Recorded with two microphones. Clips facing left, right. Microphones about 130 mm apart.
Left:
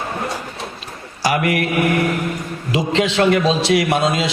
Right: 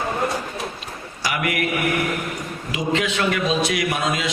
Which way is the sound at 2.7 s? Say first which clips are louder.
Left 5 dB; 30° left (ahead or behind).